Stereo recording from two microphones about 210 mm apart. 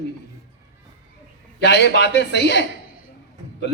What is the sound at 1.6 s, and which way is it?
A man's voice, 55° left (ahead or behind).